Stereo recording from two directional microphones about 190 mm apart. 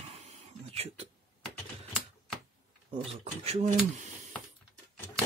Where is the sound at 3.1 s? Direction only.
35° right (ahead or behind).